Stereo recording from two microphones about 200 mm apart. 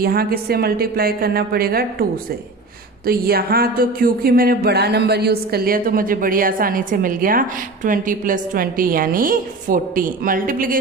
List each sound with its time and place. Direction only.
0.0 s speech: 50° right (ahead or behind)
3.1 s speech: 50° right (ahead or behind)